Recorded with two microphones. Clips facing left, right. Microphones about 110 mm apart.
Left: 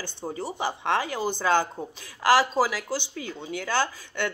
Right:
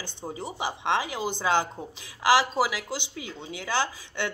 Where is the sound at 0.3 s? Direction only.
15° right (ahead or behind).